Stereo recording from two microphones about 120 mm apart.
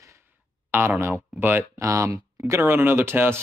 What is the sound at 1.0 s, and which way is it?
Speech, 15° right (ahead or behind).